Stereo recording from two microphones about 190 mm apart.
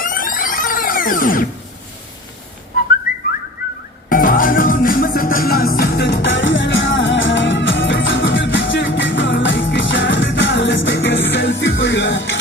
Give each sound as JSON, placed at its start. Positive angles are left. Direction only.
{"t": 0.0, "sound": "music", "side_deg": 45}
{"t": 3.1, "sound": "whistling", "side_deg": 45}
{"t": 4.1, "sound": "music", "side_deg": 45}